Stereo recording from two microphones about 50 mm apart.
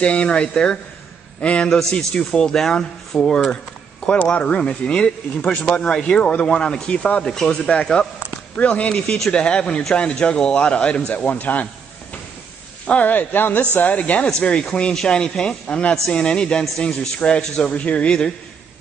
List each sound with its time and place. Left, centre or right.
0.0 s speech: left
1.8 s speech: centre
4.2 s speech: left
8.5 s speech: left
11.1 s a man's voice: left